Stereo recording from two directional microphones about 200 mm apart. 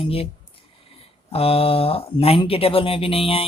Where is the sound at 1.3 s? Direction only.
30° left (ahead or behind).